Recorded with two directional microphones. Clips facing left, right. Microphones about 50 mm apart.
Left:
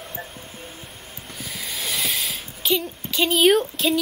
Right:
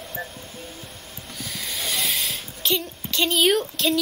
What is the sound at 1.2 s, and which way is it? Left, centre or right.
Snort, centre.